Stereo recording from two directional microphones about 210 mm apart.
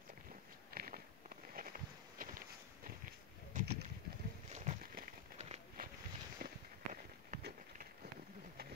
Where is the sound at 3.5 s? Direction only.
40° right (ahead or behind).